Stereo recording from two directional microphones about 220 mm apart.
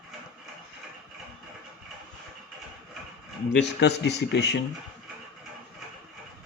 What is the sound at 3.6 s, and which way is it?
Speech, 50° left (ahead or behind).